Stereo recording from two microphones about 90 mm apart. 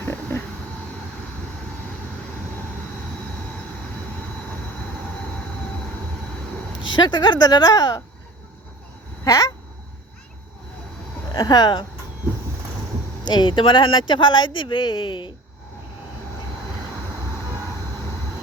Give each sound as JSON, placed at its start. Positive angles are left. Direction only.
{"t": 0.0, "sound": "a sound", "side_deg": 25}
{"t": 6.9, "sound": "speech", "side_deg": 55}
{"t": 9.2, "sound": "speech", "side_deg": 45}
{"t": 11.3, "sound": "speech", "side_deg": 50}
{"t": 13.2, "sound": "speech", "side_deg": 55}